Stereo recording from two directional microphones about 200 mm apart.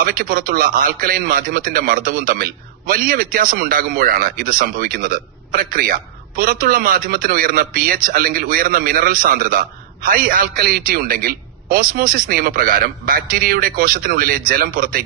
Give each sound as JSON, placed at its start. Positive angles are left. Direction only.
{"t": 0.0, "sound": "a man's voice", "side_deg": -45}